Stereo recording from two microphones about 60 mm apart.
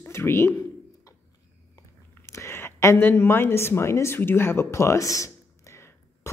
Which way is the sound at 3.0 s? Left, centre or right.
Left.